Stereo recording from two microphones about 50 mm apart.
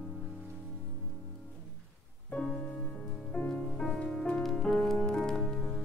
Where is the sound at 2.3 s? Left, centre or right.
Centre.